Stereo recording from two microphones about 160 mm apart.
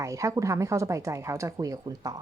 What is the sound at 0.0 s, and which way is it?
Speech, 20° right (ahead or behind).